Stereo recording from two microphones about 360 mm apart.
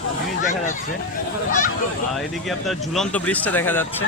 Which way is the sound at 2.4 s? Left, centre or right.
Centre.